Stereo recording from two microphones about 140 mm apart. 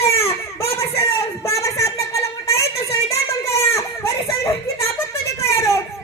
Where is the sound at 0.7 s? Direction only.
20° left (ahead or behind).